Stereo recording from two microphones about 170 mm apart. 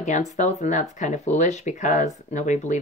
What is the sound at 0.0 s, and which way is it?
Speech, 45° left (ahead or behind).